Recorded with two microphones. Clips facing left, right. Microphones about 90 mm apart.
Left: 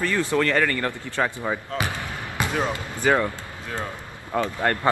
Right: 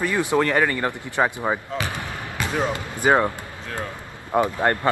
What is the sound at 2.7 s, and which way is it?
Speech, 20° right (ahead or behind).